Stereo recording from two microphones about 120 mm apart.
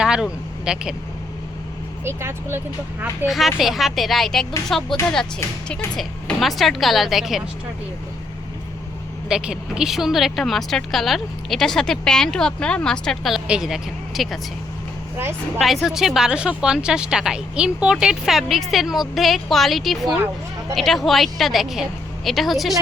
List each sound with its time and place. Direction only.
0.0 s speech: 5° right (ahead or behind)
2.0 s speech: 20° right (ahead or behind)
3.2 s speech: centre (ahead or behind)
6.0 s speech: centre (ahead or behind)
9.3 s speech: 5° right (ahead or behind)
15.5 s a woman's voice: centre (ahead or behind)